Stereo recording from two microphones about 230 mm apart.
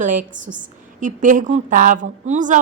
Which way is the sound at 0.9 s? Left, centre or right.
Right.